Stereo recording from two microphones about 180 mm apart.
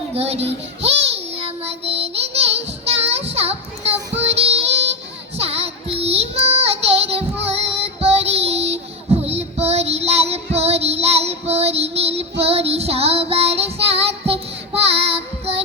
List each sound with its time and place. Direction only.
0.1 s child singing: 35° right (ahead or behind)